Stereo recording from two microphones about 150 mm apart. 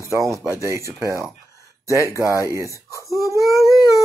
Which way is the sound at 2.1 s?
20° left (ahead or behind).